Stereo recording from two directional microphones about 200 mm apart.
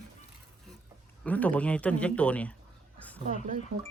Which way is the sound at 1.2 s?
5° left (ahead or behind).